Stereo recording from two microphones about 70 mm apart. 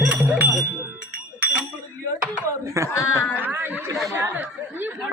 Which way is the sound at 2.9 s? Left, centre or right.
Left.